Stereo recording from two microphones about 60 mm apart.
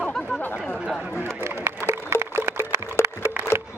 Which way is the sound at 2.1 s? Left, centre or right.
Right.